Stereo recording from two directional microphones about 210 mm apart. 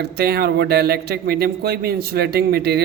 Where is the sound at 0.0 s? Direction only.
50° right (ahead or behind).